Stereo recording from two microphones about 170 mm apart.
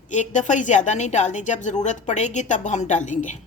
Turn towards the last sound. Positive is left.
turn(degrees=45)  # may be behind; listen again after turning